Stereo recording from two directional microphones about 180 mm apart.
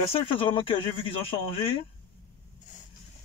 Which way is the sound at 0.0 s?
30° left (ahead or behind).